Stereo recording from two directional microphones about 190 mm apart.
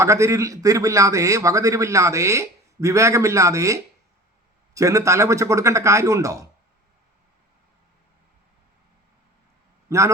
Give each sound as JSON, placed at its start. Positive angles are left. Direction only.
{"t": 0.0, "sound": "a man's voice", "side_deg": -15}
{"t": 9.9, "sound": "a man's voice", "side_deg": -15}